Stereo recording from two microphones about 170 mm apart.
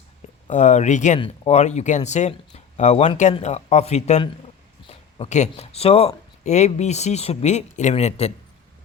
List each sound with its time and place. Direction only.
0.5 s speech: 45° left (ahead or behind)